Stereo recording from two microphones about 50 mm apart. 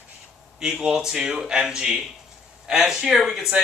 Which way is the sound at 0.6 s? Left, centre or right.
Centre.